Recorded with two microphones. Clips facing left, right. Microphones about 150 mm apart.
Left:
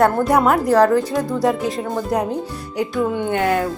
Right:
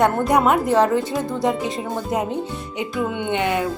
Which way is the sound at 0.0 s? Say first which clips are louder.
Left 2 dB; centre (ahead or behind).